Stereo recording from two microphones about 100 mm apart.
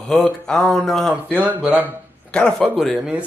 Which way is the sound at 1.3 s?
15° right (ahead or behind).